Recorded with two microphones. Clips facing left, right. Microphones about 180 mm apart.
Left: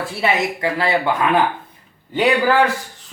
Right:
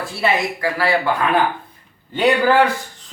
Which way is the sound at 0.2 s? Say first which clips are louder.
Even; 20° left (ahead or behind).